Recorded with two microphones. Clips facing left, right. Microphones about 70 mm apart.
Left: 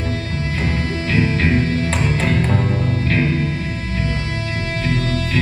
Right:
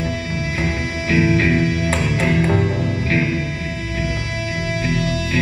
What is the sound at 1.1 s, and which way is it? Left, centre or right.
Music, centre.